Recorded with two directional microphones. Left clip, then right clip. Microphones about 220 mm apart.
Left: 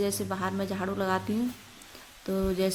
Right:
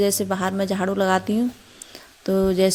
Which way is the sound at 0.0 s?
35° right (ahead or behind).